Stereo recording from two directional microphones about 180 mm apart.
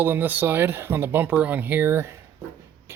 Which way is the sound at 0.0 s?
10° right (ahead or behind).